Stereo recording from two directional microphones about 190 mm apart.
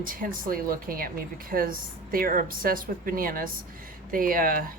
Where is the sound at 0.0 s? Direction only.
45° right (ahead or behind).